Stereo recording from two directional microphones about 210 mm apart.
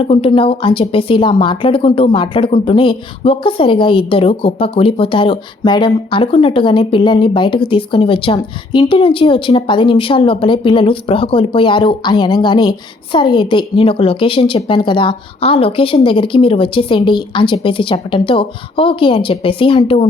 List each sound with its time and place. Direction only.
0.0 s a woman's voice: 25° left (ahead or behind)